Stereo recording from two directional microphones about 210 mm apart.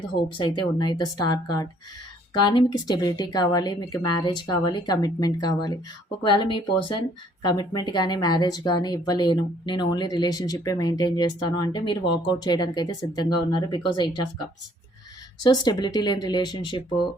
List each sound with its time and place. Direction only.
0.3 s a woman's voice: 20° left (ahead or behind)
15.4 s a woman's voice: 20° left (ahead or behind)